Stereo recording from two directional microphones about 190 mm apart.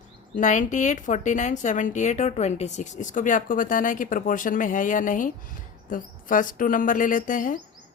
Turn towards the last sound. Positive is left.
turn(degrees=45)  # may be behind; listen again after turning